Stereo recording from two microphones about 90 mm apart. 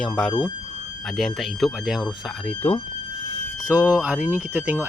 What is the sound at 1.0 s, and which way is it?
Speech, centre (ahead or behind).